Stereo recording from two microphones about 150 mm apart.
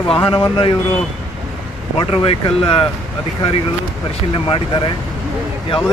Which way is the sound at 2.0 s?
30° left (ahead or behind).